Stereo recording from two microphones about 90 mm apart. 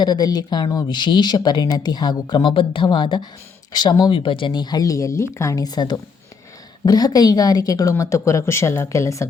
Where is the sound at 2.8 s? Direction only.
60° left (ahead or behind); by 5.6 s 35° left (ahead or behind).